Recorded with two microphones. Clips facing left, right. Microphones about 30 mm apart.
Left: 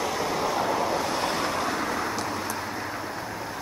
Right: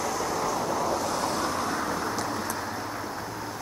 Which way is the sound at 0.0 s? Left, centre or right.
Left.